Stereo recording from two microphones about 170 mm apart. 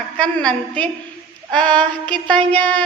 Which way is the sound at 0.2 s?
5° left (ahead or behind).